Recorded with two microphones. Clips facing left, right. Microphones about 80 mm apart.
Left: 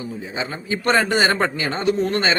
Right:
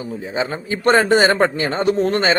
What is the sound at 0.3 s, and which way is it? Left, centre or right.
Speech, right.